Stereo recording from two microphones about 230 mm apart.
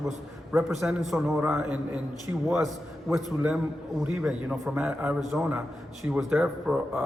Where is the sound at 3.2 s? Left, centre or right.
Centre.